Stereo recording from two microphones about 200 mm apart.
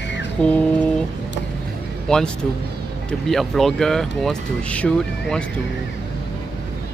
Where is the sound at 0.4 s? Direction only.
5° left (ahead or behind).